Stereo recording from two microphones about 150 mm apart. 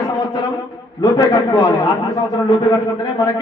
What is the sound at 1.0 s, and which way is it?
A man's voice, 30° left (ahead or behind).